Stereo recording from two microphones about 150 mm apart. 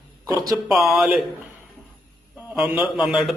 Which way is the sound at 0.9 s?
Centre (ahead or behind).